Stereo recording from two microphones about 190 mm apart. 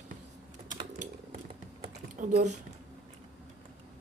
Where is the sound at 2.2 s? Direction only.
35° right (ahead or behind).